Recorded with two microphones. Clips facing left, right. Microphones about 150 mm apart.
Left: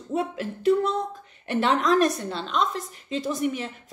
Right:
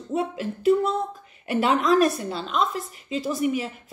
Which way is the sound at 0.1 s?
Centre (ahead or behind).